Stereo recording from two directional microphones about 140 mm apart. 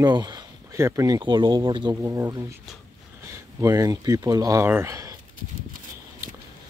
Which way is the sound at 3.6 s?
25° right (ahead or behind).